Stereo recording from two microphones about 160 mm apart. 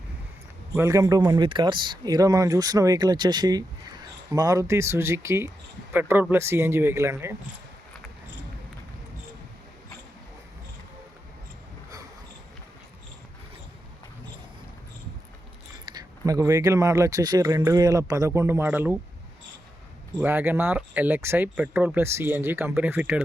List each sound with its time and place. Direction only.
0.8 s speech: 20° right (ahead or behind)
15.9 s speech: 25° right (ahead or behind)
20.1 s speech: 15° right (ahead or behind)